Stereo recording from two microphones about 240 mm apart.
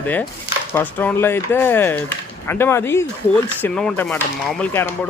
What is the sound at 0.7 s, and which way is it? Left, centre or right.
Speech, centre.